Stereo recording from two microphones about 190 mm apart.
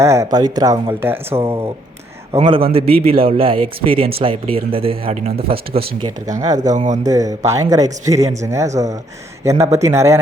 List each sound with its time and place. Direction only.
0.0 s speech: 15° right (ahead or behind)
2.3 s speech: 25° right (ahead or behind)
6.7 s speech: 40° right (ahead or behind)
7.0 s speech: 20° right (ahead or behind)